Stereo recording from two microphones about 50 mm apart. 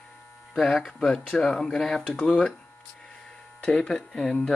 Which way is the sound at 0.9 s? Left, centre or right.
Centre.